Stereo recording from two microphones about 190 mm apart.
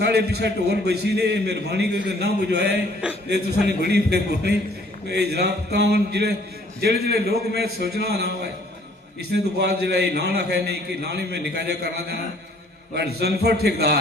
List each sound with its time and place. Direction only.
0.0 s a man's voice: 60° right (ahead or behind)
3.0 s a sound: 5° right (ahead or behind)
3.7 s a man's voice: 60° right (ahead or behind)
9.3 s a man's voice: 60° right (ahead or behind)